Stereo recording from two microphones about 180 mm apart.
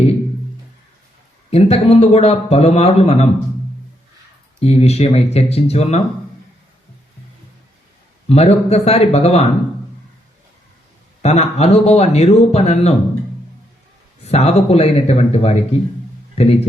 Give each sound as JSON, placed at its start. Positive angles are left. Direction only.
{"t": 1.5, "sound": "speech", "side_deg": 35}
{"t": 4.6, "sound": "speech", "side_deg": 35}
{"t": 8.3, "sound": "speech", "side_deg": 35}
{"t": 11.2, "sound": "speech", "side_deg": 35}
{"t": 14.3, "sound": "speech", "side_deg": 35}